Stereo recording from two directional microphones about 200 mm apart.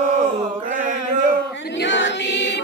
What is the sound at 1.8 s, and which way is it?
Choir, 65° left (ahead or behind).